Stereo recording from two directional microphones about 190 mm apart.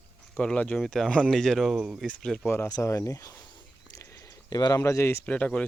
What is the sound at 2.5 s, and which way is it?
Speech, 15° left (ahead or behind).